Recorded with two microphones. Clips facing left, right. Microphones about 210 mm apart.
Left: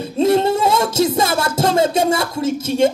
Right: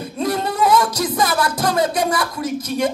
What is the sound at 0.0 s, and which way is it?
Music, 25° left (ahead or behind).